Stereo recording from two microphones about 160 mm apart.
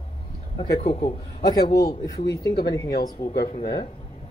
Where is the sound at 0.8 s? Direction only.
40° left (ahead or behind).